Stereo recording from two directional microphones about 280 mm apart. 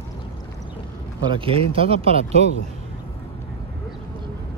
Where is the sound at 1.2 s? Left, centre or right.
Centre.